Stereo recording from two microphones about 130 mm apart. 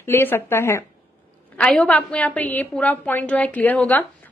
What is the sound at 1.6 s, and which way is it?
A woman's voice, 10° left (ahead or behind).